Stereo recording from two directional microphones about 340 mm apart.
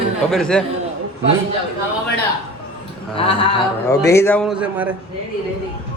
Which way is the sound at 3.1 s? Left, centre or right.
Centre.